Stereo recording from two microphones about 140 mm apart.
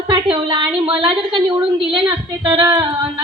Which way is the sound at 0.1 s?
35° right (ahead or behind).